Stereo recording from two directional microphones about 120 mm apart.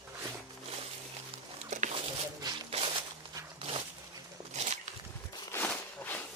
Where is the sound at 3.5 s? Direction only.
50° right (ahead or behind).